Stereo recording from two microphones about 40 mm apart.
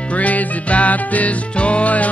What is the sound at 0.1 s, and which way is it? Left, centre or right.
Music, left.